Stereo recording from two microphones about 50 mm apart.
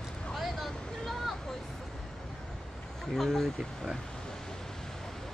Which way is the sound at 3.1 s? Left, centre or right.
Centre.